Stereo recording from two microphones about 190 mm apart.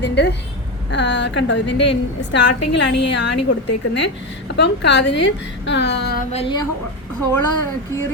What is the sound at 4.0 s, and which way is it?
A woman's voice, 65° left (ahead or behind).